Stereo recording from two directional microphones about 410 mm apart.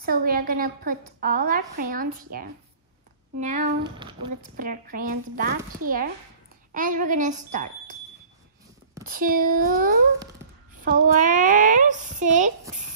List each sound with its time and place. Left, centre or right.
0.0 s a woman's voice: right
9.0 s a woman's voice: right